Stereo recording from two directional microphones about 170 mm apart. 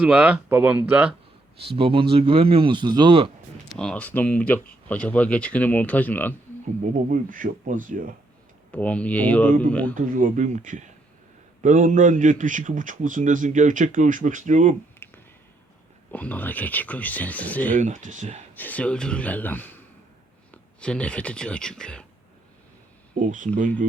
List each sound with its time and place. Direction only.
0.0 s speech: 10° right (ahead or behind)
1.5 s speech: 35° right (ahead or behind)
3.8 s speech: 5° left (ahead or behind)
6.7 s a man's voice: 45° right (ahead or behind)
8.7 s speech: 10° left (ahead or behind)
9.9 s a man's voice: 50° right (ahead or behind)
14.9 s a sound: 10° left (ahead or behind)
16.1 s speech: 10° left (ahead or behind)
17.7 s a man's voice: 45° right (ahead or behind)
18.5 s speech: 10° left (ahead or behind)
23.1 s a man's voice: 50° right (ahead or behind)